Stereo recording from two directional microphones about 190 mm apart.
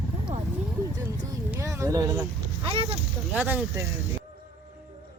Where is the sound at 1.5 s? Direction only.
15° right (ahead or behind).